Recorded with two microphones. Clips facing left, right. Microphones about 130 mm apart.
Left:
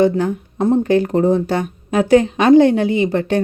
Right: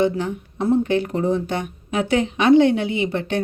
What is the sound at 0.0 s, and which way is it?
Speech, 40° left (ahead or behind).